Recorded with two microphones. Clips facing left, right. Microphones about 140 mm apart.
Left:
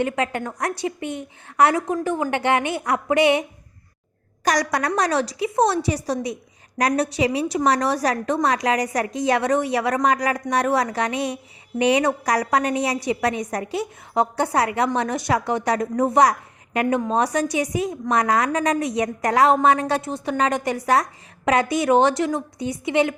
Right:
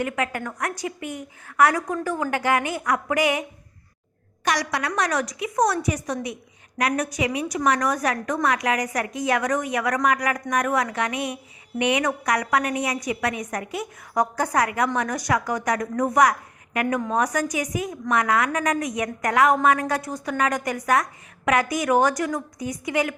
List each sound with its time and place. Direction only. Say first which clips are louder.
0.0 s a woman's voice: left 3 dB; 25° left (ahead or behind)
4.4 s a woman's voice: left 4 dB; 45° left (ahead or behind); by 23.1 s 25° left (ahead or behind)